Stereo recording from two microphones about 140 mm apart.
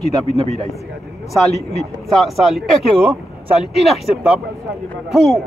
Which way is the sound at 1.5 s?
50° left (ahead or behind).